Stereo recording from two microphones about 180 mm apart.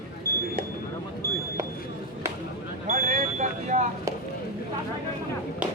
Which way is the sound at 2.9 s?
50° right (ahead or behind).